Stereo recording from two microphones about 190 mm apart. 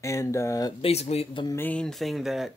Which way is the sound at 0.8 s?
35° left (ahead or behind).